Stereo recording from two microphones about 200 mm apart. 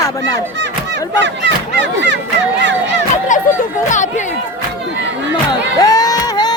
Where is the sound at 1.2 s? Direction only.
60° right (ahead or behind).